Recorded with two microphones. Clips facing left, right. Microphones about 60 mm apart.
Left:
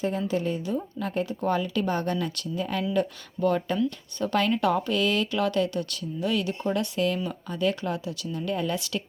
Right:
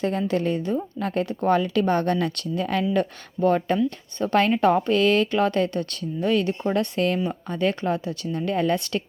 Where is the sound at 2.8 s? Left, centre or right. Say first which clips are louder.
Right 3 dB; right.